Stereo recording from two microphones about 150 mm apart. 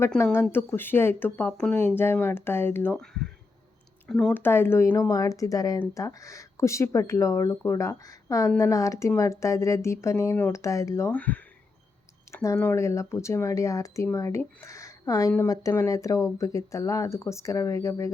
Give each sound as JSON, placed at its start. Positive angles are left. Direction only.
{"t": 0.5, "sound": "speech", "side_deg": 15}
{"t": 3.0, "sound": "speech", "side_deg": 5}